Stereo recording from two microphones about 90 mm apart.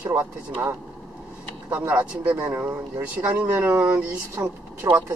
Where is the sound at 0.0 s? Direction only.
25° right (ahead or behind).